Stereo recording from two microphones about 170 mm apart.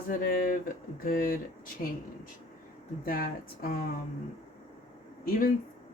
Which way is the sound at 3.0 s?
60° left (ahead or behind).